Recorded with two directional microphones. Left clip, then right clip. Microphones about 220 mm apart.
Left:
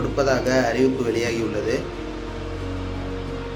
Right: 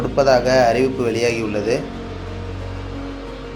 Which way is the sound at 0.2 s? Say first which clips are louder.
Right 7 dB; 15° right (ahead or behind).